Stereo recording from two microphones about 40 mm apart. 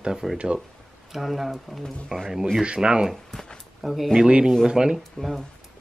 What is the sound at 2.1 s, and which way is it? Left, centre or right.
Speech, centre.